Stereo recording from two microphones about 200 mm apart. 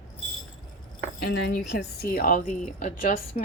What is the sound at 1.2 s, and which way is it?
A woman's voice, 55° left (ahead or behind).